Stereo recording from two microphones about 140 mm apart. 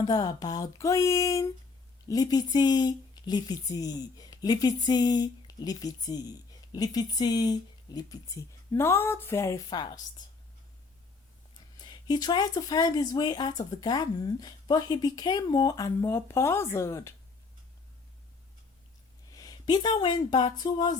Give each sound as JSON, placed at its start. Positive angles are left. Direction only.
{"t": 0.0, "sound": "speech", "side_deg": 30}
{"t": 11.8, "sound": "speech", "side_deg": 30}
{"t": 19.3, "sound": "a sound", "side_deg": 25}
{"t": 20.0, "sound": "speech", "side_deg": 30}